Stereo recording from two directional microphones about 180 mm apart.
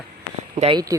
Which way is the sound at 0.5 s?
30° right (ahead or behind).